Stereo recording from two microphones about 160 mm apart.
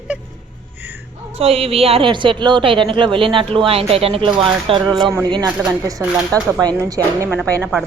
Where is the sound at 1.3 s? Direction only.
40° right (ahead or behind); by 6.0 s 20° right (ahead or behind).